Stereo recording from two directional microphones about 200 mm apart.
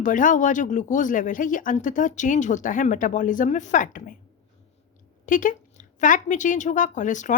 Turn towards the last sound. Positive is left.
turn(degrees=40)  # may be behind; listen again after turning